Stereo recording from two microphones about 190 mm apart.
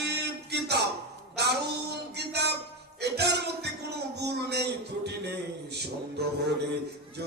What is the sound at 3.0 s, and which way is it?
Music, 60° right (ahead or behind).